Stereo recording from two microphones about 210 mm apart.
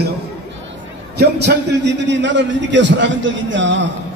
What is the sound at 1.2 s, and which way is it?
A man's voice, 55° right (ahead or behind).